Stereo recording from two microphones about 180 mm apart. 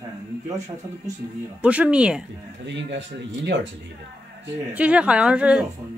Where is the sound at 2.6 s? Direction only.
80° right.